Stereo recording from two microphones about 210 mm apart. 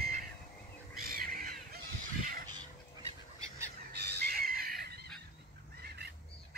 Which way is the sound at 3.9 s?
50° right (ahead or behind).